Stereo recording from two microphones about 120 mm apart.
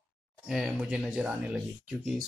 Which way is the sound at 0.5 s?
5° right (ahead or behind).